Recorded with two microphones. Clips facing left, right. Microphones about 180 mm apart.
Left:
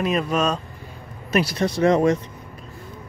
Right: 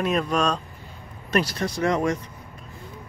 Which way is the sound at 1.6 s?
25° left (ahead or behind).